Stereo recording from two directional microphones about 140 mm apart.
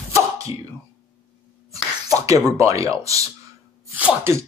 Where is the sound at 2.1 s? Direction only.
25° right (ahead or behind).